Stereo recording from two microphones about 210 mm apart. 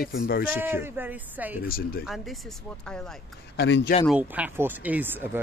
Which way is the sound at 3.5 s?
55° left (ahead or behind).